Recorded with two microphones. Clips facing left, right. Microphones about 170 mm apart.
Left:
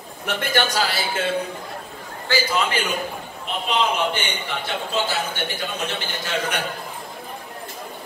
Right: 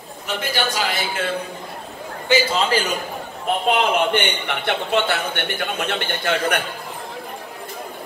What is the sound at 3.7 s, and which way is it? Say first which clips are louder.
A man's voice: right 3 dB; 65° right (ahead or behind).